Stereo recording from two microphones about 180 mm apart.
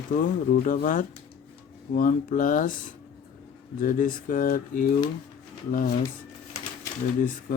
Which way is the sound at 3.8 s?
50° left (ahead or behind).